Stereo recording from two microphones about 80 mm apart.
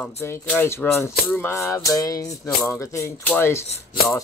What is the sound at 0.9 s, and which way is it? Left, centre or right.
Speech, left.